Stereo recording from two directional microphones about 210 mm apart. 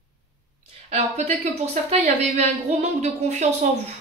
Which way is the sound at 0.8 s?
30° right (ahead or behind).